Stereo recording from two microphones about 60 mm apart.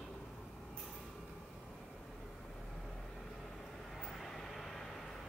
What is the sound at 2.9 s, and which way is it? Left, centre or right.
Vehicle, centre.